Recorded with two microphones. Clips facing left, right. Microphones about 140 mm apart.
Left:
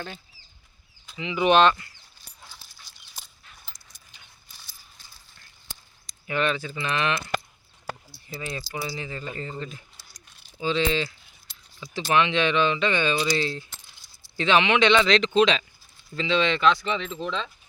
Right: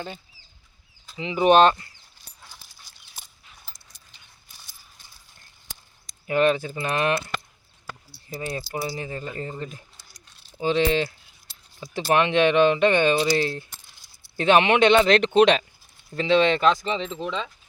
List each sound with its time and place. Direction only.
1.1 s speech: 35° right (ahead or behind)
6.1 s speech: 45° right (ahead or behind)
8.3 s speech: 40° right (ahead or behind)
12.1 s speech: 50° right (ahead or behind); by 17.1 s 35° right (ahead or behind)
17.1 s speech: 15° right (ahead or behind)